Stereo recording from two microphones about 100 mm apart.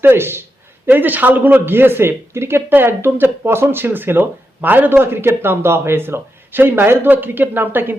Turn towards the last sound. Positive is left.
turn(degrees=-20)  # may be behind; listen again after turning